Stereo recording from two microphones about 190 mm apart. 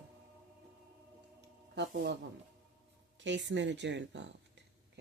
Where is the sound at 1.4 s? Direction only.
65° right (ahead or behind).